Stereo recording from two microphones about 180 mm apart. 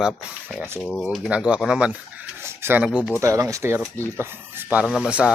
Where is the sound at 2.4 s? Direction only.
10° right (ahead or behind).